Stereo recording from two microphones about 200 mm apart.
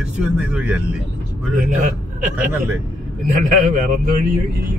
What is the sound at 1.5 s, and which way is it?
Speech, 40° right (ahead or behind).